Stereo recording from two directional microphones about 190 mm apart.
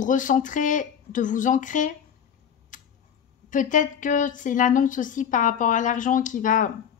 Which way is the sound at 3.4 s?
45° left (ahead or behind).